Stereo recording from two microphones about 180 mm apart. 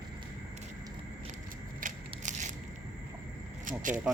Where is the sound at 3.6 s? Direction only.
45° right (ahead or behind).